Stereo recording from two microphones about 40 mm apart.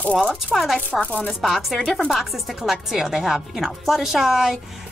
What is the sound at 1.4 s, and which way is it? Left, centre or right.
A woman's voice, centre.